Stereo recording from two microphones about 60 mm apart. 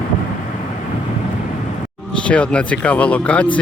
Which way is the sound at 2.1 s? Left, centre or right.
Centre.